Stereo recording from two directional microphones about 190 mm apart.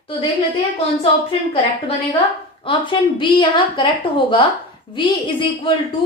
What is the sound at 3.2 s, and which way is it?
A woman's voice, 25° left (ahead or behind).